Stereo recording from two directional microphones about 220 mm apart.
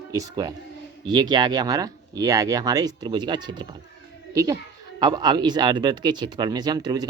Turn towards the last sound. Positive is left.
turn(degrees=-20)  # may be behind; listen again after turning